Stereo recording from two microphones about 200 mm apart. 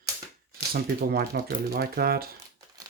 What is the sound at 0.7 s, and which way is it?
Speech, 50° right (ahead or behind).